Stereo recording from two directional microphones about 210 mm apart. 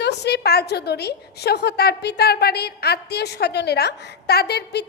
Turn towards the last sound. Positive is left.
turn(degrees=50)  # may be behind; listen again after turning